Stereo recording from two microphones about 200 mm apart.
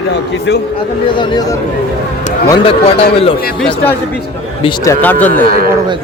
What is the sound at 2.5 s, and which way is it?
Speech, 30° left (ahead or behind).